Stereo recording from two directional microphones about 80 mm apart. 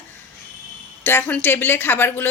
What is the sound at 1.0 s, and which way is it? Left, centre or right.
A woman's voice, left.